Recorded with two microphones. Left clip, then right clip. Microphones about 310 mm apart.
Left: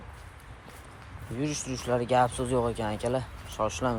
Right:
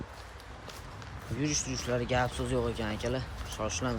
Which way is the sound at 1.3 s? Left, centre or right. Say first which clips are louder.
Even; centre.